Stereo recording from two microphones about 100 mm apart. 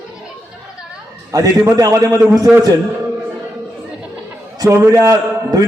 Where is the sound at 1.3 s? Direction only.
35° right (ahead or behind).